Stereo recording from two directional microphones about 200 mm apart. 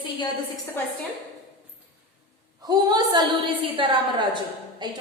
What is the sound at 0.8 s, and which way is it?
Speech, 10° left (ahead or behind).